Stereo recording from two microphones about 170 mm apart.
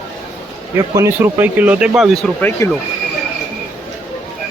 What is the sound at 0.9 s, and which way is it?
Speech, 15° right (ahead or behind).